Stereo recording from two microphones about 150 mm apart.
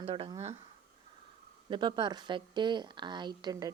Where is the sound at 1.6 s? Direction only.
30° right (ahead or behind).